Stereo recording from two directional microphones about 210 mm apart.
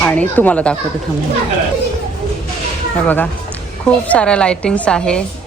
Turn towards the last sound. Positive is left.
turn(degrees=5)  # may be behind; listen again after turning